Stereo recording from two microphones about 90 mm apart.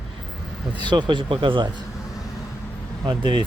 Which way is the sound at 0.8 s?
55° right (ahead or behind).